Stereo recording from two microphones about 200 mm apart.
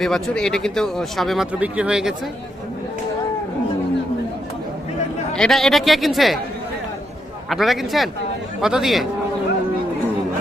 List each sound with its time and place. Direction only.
0.0 s speech: 5° left (ahead or behind)
5.3 s speech: centre (ahead or behind)
7.5 s speech: centre (ahead or behind)